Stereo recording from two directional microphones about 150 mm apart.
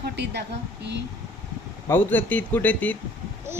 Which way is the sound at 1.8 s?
15° left (ahead or behind).